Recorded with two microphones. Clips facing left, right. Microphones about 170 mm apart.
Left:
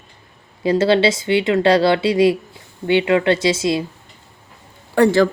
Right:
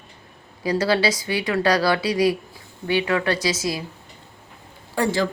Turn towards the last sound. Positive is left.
turn(degrees=60)  # may be behind; listen again after turning